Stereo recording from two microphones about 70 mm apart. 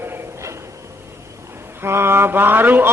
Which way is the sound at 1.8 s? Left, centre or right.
Right.